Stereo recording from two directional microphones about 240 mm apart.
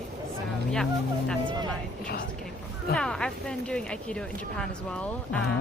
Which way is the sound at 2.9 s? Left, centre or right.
Centre.